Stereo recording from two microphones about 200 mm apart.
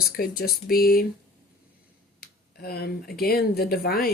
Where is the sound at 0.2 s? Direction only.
45° left (ahead or behind).